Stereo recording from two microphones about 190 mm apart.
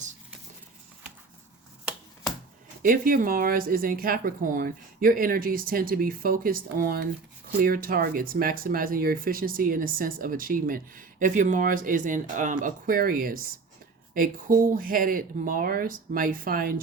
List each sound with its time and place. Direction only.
2.8 s speech: 45° right (ahead or behind)